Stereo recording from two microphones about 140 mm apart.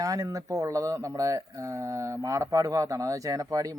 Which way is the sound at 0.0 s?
25° right (ahead or behind).